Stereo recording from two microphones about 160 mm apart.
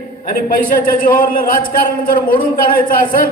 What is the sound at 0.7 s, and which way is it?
A man's voice, 60° left (ahead or behind).